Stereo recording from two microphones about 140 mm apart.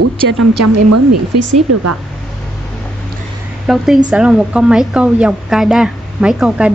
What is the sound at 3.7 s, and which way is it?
Speech, 5° right (ahead or behind).